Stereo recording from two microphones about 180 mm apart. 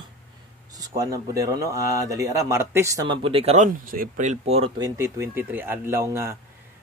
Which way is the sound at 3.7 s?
50° right (ahead or behind).